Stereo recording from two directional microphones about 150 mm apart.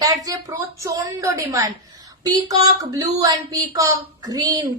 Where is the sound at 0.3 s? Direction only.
20° right (ahead or behind).